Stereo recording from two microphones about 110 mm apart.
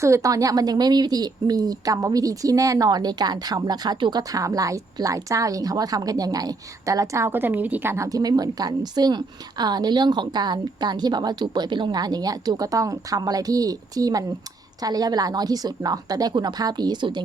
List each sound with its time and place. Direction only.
0.0 s a woman's voice: 30° right (ahead or behind)